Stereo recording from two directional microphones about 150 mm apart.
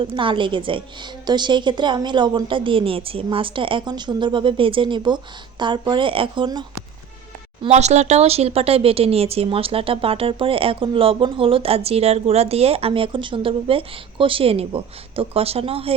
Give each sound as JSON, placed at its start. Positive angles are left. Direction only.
{"t": 0.0, "sound": "speech", "side_deg": -35}
{"t": 7.7, "sound": "speech", "side_deg": -50}